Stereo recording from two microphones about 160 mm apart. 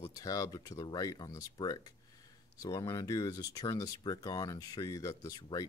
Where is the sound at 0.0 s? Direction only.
20° left (ahead or behind).